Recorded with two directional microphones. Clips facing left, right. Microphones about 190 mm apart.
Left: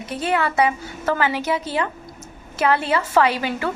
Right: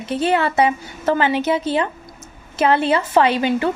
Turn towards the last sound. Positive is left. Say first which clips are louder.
# right 4 dB
turn(degrees=-20)  # may be behind; listen again after turning